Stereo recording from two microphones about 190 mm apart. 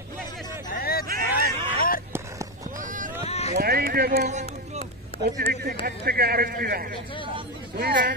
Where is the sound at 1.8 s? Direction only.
50° left (ahead or behind).